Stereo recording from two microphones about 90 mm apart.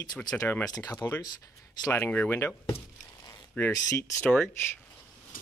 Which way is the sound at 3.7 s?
40° left (ahead or behind).